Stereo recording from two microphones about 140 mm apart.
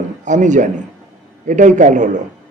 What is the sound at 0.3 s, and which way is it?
A man's voice, 60° right (ahead or behind).